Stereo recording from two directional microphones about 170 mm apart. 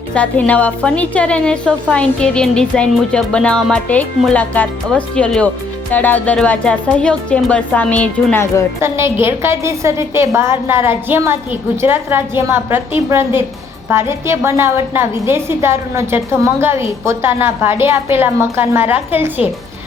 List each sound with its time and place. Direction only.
0.1 s a woman's voice: 10° left (ahead or behind)
8.8 s a woman's voice: 15° right (ahead or behind)